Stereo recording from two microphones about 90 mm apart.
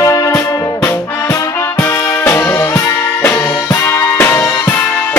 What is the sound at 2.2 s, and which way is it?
Music, 25° left (ahead or behind).